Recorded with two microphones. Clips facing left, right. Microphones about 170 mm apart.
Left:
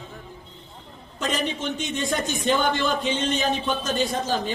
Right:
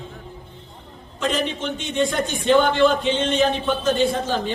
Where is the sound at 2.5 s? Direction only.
45° left (ahead or behind).